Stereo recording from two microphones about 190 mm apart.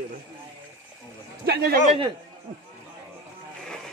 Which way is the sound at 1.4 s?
55° right (ahead or behind).